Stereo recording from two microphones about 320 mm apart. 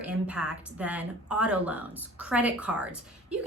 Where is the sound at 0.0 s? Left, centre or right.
Centre.